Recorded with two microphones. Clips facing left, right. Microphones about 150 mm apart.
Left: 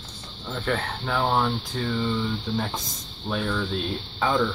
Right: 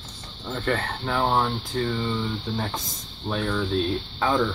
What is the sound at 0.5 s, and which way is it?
Speech, 5° left (ahead or behind).